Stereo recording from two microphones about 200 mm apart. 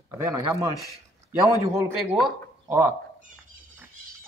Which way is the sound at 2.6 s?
10° right (ahead or behind).